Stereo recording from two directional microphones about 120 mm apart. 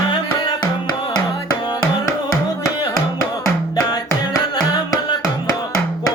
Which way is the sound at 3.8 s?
35° left (ahead or behind).